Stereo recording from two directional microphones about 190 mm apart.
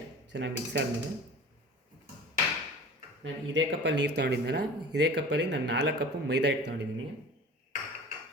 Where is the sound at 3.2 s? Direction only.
70° right (ahead or behind).